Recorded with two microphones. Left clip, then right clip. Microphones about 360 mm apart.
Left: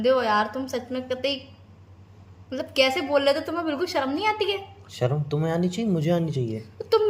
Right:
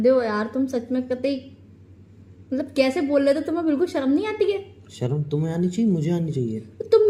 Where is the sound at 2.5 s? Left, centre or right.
Left.